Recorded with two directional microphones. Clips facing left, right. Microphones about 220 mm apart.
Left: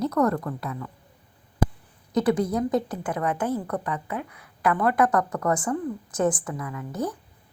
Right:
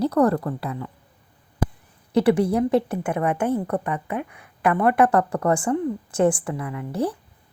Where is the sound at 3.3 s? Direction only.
10° right (ahead or behind).